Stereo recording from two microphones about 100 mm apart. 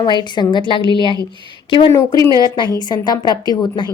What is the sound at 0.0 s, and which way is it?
A woman's voice, 50° left (ahead or behind).